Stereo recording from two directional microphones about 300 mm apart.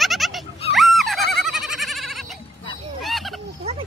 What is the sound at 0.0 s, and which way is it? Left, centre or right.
Goat, centre.